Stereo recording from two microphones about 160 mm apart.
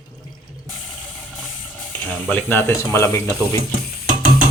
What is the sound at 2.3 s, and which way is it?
Speech, 15° left (ahead or behind).